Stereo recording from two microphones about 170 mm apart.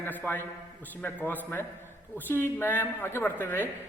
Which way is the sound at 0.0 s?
10° left (ahead or behind).